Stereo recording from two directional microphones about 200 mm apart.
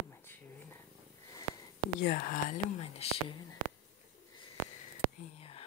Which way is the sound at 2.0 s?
45° left (ahead or behind).